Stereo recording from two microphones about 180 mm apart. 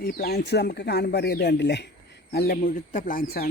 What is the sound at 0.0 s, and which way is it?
Speech, 60° left (ahead or behind).